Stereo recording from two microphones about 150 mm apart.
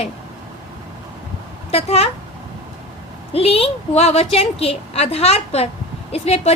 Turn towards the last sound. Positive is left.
turn(degrees=45)  # may be behind; listen again after turning